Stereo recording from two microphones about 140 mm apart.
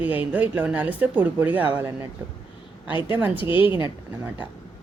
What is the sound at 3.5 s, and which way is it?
Speech, 35° left (ahead or behind).